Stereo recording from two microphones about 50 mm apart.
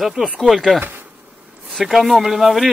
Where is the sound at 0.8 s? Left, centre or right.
Right.